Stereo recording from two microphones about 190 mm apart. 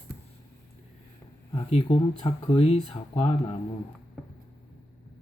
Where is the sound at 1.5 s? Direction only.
30° left (ahead or behind).